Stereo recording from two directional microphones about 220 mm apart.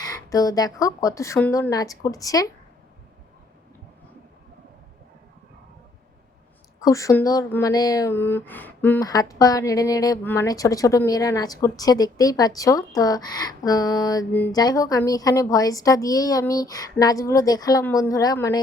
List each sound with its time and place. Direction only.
0.0 s speech: 15° left (ahead or behind)
6.8 s speech: 15° left (ahead or behind)